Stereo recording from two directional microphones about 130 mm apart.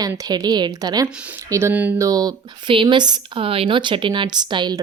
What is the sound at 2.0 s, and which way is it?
Speech, 30° right (ahead or behind).